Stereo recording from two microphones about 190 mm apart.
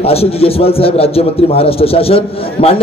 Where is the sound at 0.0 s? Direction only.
30° left (ahead or behind).